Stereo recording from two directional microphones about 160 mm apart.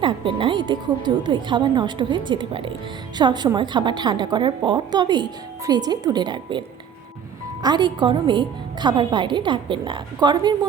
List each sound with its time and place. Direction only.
0.0 s a woman's voice: 30° right (ahead or behind)
7.6 s a woman's voice: 25° right (ahead or behind)